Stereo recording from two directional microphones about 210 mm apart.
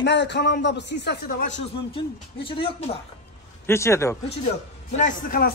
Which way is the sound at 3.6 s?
15° left (ahead or behind).